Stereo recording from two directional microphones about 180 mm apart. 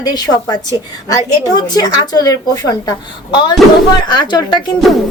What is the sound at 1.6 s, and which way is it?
A woman's voice, 20° left (ahead or behind).